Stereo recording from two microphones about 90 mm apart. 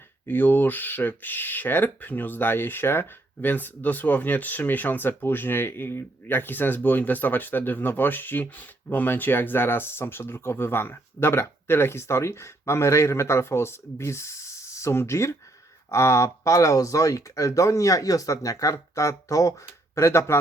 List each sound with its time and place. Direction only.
0.3 s speech: 20° left (ahead or behind)